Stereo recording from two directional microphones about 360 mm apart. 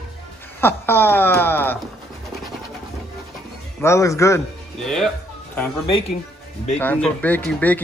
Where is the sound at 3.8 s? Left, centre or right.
Centre.